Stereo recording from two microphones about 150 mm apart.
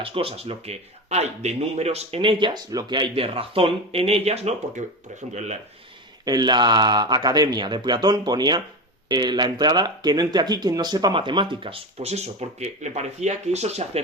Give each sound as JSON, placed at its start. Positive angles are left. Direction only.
{"t": 0.0, "sound": "speech", "side_deg": -40}
{"t": 6.2, "sound": "speech", "side_deg": -30}